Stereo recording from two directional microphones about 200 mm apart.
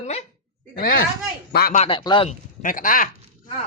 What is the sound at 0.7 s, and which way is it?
Speech, 45° left (ahead or behind).